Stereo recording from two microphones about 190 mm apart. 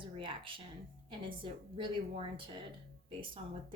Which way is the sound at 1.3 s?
25° right (ahead or behind).